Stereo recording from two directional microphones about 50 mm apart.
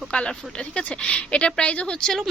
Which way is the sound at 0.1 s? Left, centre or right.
Centre.